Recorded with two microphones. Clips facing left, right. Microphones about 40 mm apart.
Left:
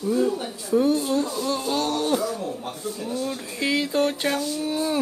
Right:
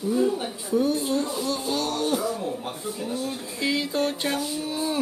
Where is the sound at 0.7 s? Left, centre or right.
Left.